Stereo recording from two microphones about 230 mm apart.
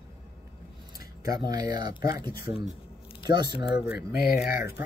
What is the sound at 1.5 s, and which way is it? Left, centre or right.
Speech, centre.